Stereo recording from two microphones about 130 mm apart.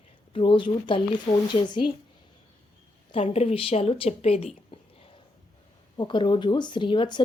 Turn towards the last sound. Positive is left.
turn(degrees=35)  # may be behind; listen again after turning